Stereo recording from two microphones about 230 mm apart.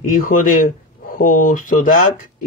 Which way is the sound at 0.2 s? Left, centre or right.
Left.